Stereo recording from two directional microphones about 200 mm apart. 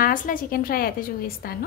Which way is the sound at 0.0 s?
45° left (ahead or behind).